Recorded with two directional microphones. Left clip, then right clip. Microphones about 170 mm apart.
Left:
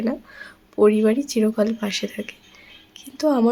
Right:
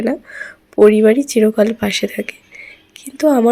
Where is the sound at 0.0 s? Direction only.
25° right (ahead or behind).